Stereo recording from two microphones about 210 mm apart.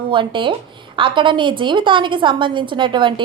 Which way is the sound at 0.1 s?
25° right (ahead or behind).